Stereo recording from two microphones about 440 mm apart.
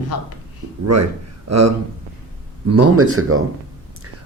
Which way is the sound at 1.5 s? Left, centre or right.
Right.